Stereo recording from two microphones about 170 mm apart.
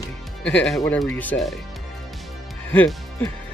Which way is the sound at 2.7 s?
10° left (ahead or behind).